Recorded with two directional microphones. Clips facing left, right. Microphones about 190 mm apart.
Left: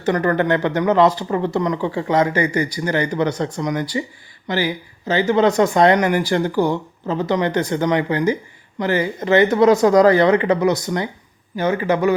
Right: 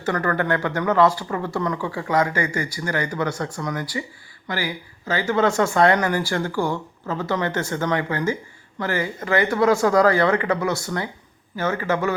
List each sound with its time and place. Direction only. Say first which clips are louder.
0.0 s a man's voice: left 5 dB; 20° left (ahead or behind)